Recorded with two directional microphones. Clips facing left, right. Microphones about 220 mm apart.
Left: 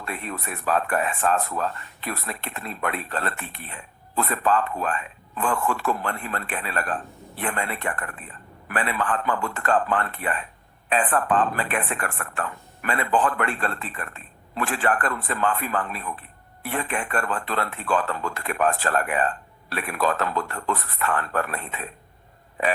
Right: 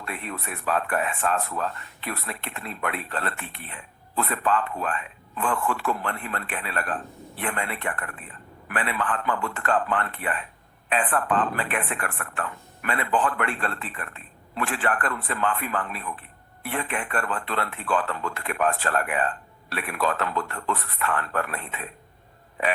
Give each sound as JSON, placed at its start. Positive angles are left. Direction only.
{"t": 0.1, "sound": "speech", "side_deg": 40}